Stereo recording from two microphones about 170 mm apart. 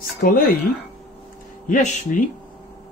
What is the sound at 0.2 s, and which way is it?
Speech, 60° left (ahead or behind).